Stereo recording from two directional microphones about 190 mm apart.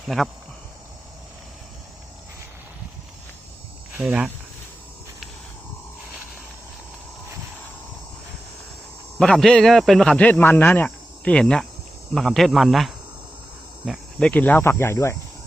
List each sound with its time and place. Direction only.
3.9 s speech: 5° right (ahead or behind)
9.1 s a man's voice: 5° left (ahead or behind)